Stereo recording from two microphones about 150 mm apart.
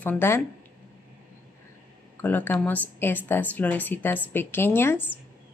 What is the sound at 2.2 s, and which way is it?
A woman's voice, 10° left (ahead or behind).